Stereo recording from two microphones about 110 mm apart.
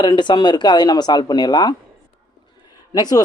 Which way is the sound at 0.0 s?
40° left (ahead or behind).